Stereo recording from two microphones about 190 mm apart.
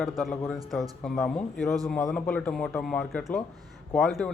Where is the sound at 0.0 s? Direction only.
Centre (ahead or behind).